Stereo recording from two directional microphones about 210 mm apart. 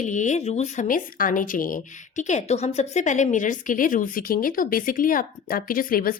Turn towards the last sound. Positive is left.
turn(degrees=45)  # may be behind; listen again after turning